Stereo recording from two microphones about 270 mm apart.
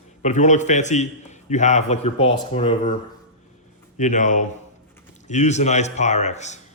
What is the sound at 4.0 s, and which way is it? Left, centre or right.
A man's voice, left.